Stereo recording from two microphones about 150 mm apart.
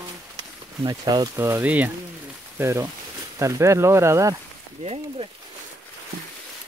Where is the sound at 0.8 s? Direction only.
25° right (ahead or behind).